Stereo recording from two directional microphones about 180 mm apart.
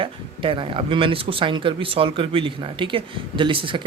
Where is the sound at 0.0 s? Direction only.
30° right (ahead or behind).